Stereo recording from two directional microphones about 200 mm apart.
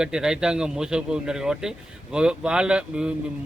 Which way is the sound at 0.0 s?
5° right (ahead or behind).